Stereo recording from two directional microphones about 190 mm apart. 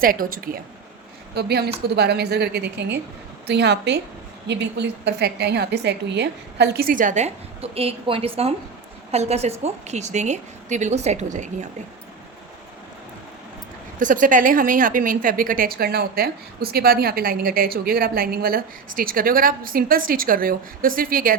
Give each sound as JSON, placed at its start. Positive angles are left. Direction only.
{"t": 0.0, "sound": "a woman's voice", "side_deg": -50}
{"t": 14.0, "sound": "a woman's voice", "side_deg": -45}